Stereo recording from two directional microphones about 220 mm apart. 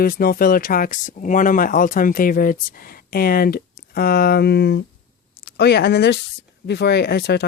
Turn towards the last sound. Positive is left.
turn(degrees=50)  # may be behind; listen again after turning